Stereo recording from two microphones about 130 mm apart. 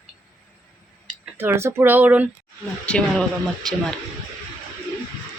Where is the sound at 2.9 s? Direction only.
5° left (ahead or behind).